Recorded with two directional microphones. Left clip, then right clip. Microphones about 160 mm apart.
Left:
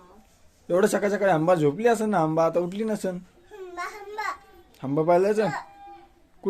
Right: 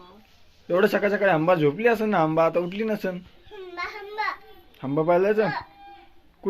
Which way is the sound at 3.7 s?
20° left (ahead or behind).